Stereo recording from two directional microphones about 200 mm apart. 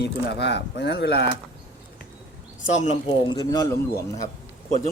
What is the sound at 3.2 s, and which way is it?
A man's voice, 20° left (ahead or behind).